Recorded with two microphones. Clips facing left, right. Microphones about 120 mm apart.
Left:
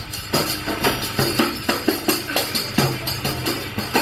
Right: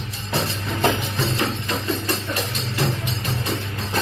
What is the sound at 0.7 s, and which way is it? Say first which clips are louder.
Music: right 2 dB; 90° left.